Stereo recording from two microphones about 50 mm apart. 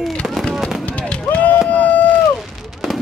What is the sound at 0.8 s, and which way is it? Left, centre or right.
Fireworks, left.